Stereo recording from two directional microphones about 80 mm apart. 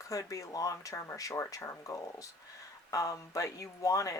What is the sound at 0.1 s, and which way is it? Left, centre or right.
Speech, left.